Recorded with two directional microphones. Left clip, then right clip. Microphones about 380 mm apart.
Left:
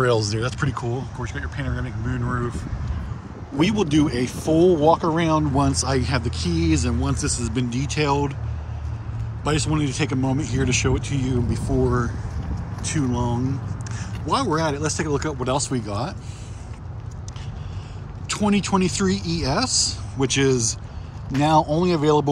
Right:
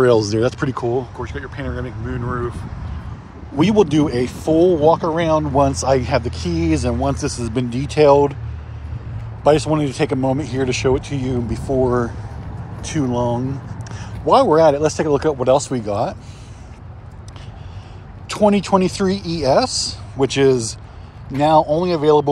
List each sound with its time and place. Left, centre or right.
0.0 s speech: centre
3.5 s speech: centre
9.4 s speech: centre
14.3 s speech: centre
18.3 s speech: centre